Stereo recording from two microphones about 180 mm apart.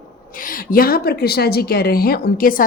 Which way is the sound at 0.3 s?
50° left (ahead or behind).